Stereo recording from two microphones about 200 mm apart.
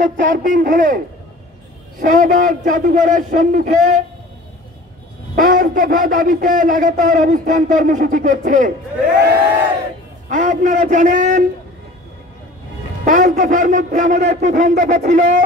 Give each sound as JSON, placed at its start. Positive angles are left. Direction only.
{"t": 0.2, "sound": "a man's voice", "side_deg": -40}
{"t": 5.3, "sound": "a man's voice", "side_deg": -45}
{"t": 10.3, "sound": "a man's voice", "side_deg": -40}
{"t": 13.0, "sound": "a man's voice", "side_deg": -40}